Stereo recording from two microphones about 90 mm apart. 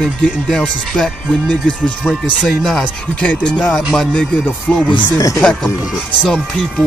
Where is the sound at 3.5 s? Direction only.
10° left (ahead or behind).